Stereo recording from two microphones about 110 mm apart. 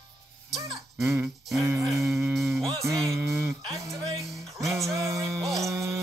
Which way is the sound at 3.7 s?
30° right (ahead or behind).